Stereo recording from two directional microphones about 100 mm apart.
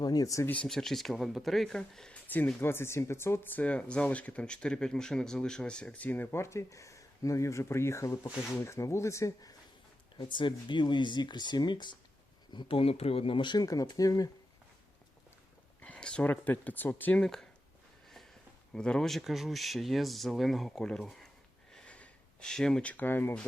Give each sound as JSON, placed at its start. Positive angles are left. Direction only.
{"t": 0.0, "sound": "speech", "side_deg": 40}
{"t": 0.4, "sound": "speech", "side_deg": 15}
{"t": 0.7, "sound": "speech", "side_deg": 5}
{"t": 2.6, "sound": "speech", "side_deg": 25}
{"t": 10.2, "sound": "speech", "side_deg": 55}
{"t": 12.5, "sound": "speech", "side_deg": 65}
{"t": 15.8, "sound": "speech", "side_deg": 10}
{"t": 18.7, "sound": "speech", "side_deg": 5}
{"t": 21.7, "sound": "a sound", "side_deg": 10}